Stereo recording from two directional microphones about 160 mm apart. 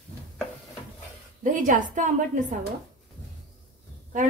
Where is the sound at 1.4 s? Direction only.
55° right (ahead or behind).